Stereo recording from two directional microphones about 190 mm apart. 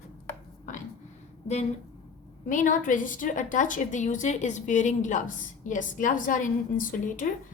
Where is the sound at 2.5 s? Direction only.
45° left (ahead or behind).